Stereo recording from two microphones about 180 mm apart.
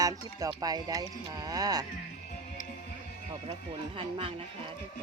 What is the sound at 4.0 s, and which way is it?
Speech, 30° right (ahead or behind).